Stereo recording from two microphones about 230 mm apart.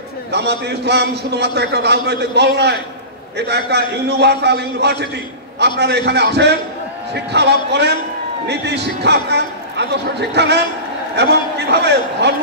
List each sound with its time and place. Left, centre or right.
0.3 s a man's voice: right
11.7 s a man's voice: right